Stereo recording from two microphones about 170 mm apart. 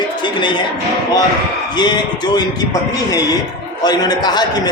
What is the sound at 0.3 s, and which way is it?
Speech, 25° left (ahead or behind).